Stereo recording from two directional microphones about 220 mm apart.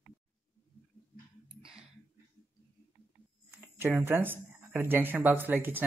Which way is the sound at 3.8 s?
10° right (ahead or behind).